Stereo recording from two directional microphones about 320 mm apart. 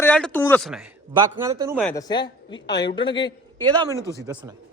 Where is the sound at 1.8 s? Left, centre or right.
Centre.